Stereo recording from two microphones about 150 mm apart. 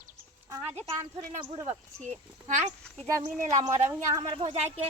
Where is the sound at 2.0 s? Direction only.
55° right (ahead or behind).